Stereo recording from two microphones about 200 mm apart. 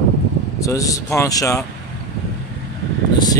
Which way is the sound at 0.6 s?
15° left (ahead or behind).